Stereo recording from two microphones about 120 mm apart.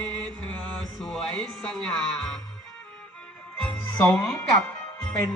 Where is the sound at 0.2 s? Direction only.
10° left (ahead or behind).